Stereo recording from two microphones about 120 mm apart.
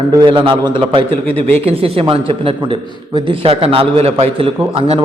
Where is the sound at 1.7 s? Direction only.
55° right (ahead or behind).